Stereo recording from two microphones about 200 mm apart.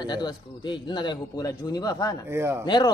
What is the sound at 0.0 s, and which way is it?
A man's voice, 20° left (ahead or behind).